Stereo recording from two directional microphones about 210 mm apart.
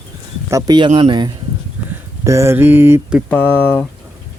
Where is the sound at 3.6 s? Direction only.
5° left (ahead or behind).